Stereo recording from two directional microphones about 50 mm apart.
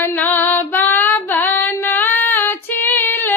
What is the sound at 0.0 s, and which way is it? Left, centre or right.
Female singing, left.